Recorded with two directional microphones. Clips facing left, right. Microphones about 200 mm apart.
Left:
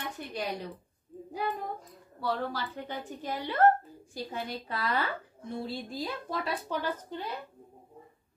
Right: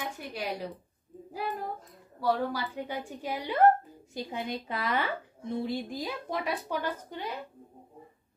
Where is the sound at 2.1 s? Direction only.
10° right (ahead or behind).